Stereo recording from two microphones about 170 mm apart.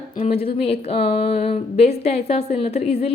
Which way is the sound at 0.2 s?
35° left (ahead or behind).